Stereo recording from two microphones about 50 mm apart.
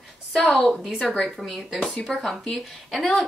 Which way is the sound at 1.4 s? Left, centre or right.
Centre.